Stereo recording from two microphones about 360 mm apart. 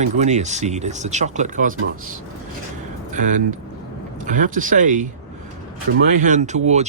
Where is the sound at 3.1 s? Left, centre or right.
Right.